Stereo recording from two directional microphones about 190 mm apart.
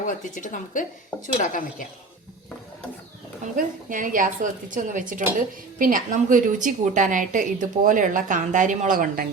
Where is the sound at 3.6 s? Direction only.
45° right (ahead or behind).